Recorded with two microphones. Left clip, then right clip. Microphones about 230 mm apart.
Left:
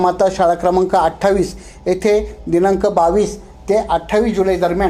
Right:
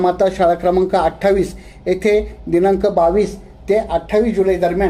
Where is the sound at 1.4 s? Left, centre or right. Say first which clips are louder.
Even; centre.